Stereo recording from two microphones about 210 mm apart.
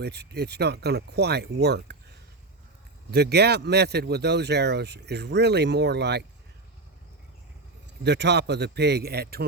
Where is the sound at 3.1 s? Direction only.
50° right (ahead or behind).